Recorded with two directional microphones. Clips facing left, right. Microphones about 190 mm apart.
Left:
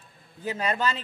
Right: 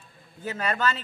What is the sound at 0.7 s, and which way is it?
Speech, 35° left (ahead or behind).